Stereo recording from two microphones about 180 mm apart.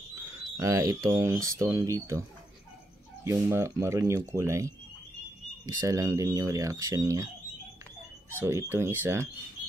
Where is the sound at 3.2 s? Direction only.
15° right (ahead or behind).